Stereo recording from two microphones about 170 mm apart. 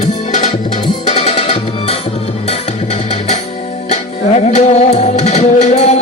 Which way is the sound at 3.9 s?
40° left (ahead or behind).